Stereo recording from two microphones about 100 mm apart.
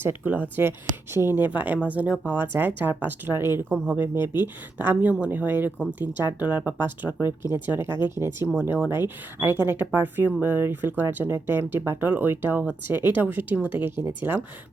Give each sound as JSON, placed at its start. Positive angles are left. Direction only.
{"t": 0.0, "sound": "speech", "side_deg": -20}